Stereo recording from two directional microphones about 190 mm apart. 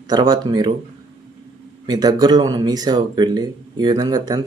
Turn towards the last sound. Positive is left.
turn(degrees=-20)  # may be behind; listen again after turning